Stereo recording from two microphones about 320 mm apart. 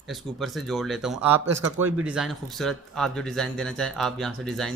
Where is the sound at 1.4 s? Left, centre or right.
Right.